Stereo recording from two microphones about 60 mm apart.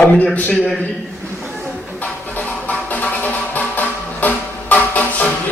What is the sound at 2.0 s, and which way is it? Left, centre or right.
Music, left.